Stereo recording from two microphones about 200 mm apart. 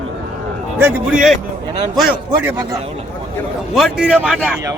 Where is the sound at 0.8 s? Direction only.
5° right (ahead or behind).